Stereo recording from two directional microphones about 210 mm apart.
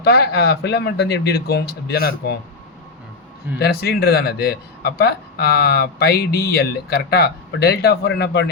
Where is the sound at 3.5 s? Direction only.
50° left (ahead or behind).